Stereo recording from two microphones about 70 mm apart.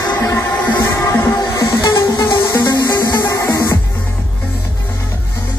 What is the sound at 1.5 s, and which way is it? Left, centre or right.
Music, left.